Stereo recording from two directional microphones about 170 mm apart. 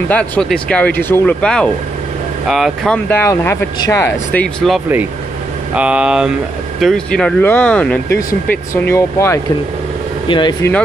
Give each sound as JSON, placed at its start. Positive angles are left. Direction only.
{"t": 0.1, "sound": "speech", "side_deg": 5}
{"t": 3.1, "sound": "speech", "side_deg": 15}
{"t": 5.8, "sound": "speech", "side_deg": -5}
{"t": 10.2, "sound": "speech", "side_deg": 30}